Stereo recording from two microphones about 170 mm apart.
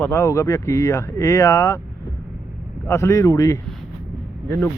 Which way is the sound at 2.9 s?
20° left (ahead or behind).